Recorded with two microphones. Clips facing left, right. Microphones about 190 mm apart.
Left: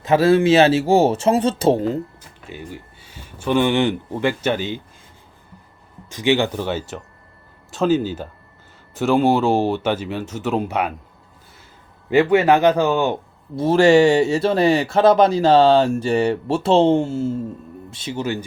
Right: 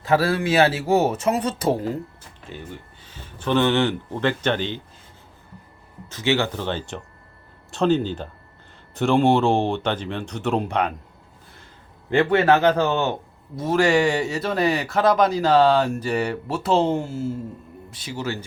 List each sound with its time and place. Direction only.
0.0 s speech: 20° left (ahead or behind)
2.4 s speech: 10° left (ahead or behind)
6.1 s a man's voice: 15° left (ahead or behind)
12.1 s a man's voice: 10° left (ahead or behind)
13.6 s speech: 30° left (ahead or behind)